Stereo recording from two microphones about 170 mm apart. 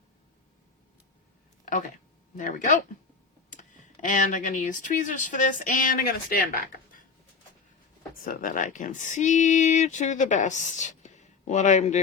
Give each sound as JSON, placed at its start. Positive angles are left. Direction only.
{"t": 2.3, "sound": "speech", "side_deg": 50}
{"t": 8.2, "sound": "speech", "side_deg": 55}